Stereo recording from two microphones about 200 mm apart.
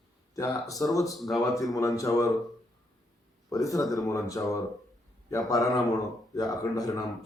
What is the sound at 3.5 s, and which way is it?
Speech, 15° left (ahead or behind).